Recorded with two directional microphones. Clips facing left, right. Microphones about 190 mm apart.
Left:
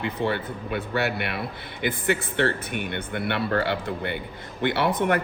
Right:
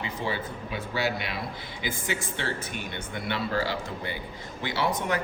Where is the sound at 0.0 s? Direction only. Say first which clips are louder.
Left 5 dB; 60° left (ahead or behind).